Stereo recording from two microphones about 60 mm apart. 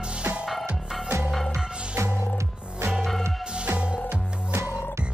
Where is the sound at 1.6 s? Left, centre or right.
Centre.